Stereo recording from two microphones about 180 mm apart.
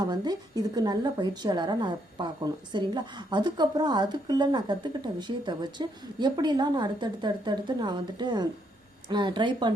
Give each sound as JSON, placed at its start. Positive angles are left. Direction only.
{"t": 0.0, "sound": "a woman's voice", "side_deg": -25}